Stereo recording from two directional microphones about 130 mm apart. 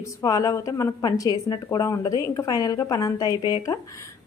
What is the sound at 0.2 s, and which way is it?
A woman's voice, 25° left (ahead or behind).